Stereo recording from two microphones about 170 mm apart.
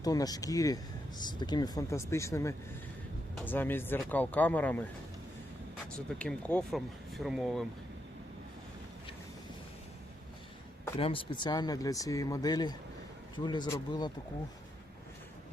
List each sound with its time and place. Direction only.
0.0 s speech: 20° left (ahead or behind)
6.1 s speech: 5° left (ahead or behind)
10.9 s speech: 30° left (ahead or behind)